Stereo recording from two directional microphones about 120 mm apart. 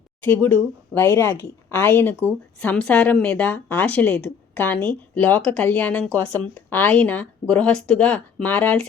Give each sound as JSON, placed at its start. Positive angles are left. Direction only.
{"t": 0.3, "sound": "speech", "side_deg": 15}